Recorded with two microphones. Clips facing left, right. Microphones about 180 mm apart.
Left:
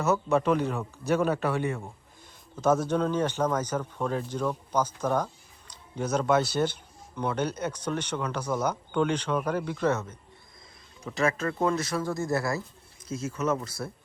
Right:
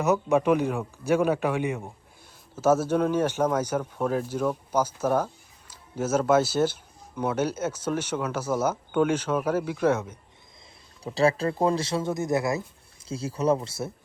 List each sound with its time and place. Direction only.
0.0 s speech: 15° right (ahead or behind)
11.0 s speech: 35° right (ahead or behind)
13.1 s speech: 30° right (ahead or behind)